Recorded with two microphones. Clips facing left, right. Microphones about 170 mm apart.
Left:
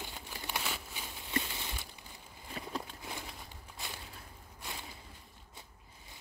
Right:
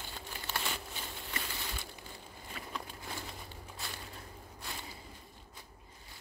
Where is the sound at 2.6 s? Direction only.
35° left (ahead or behind).